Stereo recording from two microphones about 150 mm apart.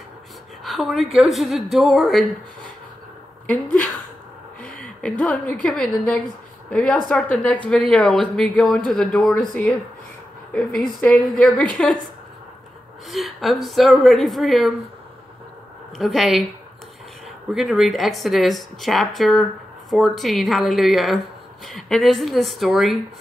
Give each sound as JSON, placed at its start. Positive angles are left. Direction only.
{"t": 0.7, "sound": "speech", "side_deg": 0}
{"t": 4.6, "sound": "a sound", "side_deg": 70}
{"t": 5.2, "sound": "a woman's voice", "side_deg": 5}
{"t": 10.5, "sound": "a woman's voice", "side_deg": 5}
{"t": 13.1, "sound": "speech", "side_deg": 0}
{"t": 16.0, "sound": "speech", "side_deg": 0}
{"t": 17.5, "sound": "speech", "side_deg": 0}